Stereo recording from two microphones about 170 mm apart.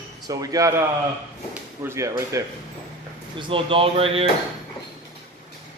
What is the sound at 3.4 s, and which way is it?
Speech, 30° right (ahead or behind).